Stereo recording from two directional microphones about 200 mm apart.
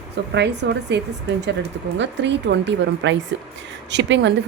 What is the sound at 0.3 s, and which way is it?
Speech, 60° right (ahead or behind).